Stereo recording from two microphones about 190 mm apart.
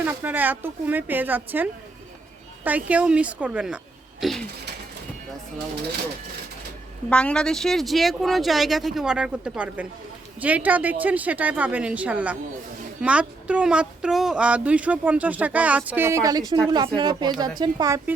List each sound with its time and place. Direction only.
0.0 s speech: 10° right (ahead or behind)
4.2 s a sound: centre (ahead or behind)
7.1 s speech: 5° left (ahead or behind); by 18.1 s 15° right (ahead or behind)